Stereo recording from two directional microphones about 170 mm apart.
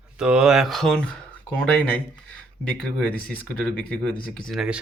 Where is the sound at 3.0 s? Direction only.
5° left (ahead or behind).